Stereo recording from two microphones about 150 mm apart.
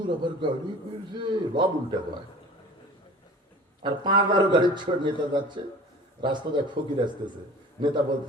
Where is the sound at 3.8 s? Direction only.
30° right (ahead or behind).